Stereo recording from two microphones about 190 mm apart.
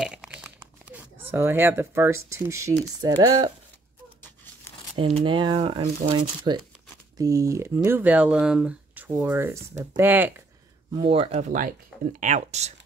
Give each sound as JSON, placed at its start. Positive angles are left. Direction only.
{"t": 0.0, "sound": "crumpling", "side_deg": -5}
{"t": 3.0, "sound": "speech", "side_deg": -20}
{"t": 4.9, "sound": "speech", "side_deg": -25}
{"t": 10.9, "sound": "speech", "side_deg": -25}